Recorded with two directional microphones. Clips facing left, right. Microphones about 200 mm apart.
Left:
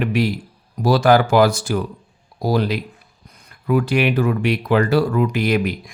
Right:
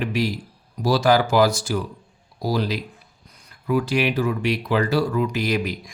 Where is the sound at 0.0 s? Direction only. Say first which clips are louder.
Left 4 dB; 55° left (ahead or behind).